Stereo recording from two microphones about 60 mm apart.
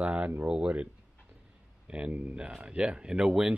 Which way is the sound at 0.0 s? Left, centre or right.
Right.